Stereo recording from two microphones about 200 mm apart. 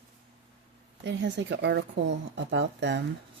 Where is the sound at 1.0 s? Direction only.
65° right (ahead or behind).